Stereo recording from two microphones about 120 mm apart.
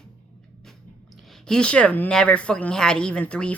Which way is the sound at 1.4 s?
5° left (ahead or behind).